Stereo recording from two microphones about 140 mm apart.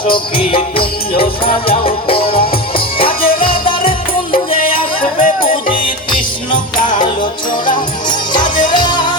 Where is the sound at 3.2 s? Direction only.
90° left.